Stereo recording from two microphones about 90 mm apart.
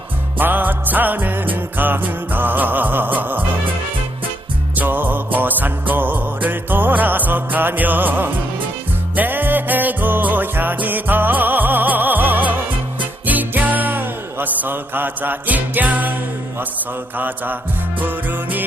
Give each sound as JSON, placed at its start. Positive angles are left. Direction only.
{"t": 0.3, "sound": "music", "side_deg": -20}
{"t": 4.7, "sound": "music", "side_deg": -20}
{"t": 17.2, "sound": "music", "side_deg": -20}